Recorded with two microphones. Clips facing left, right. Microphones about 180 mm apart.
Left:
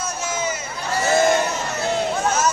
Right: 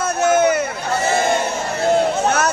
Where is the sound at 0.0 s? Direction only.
65° right (ahead or behind).